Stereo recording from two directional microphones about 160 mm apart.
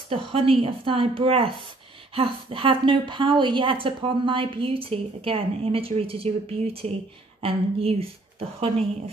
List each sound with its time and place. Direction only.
0.1 s a woman's voice: 35° right (ahead or behind)